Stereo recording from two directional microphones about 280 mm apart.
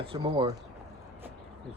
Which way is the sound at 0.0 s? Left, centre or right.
Centre.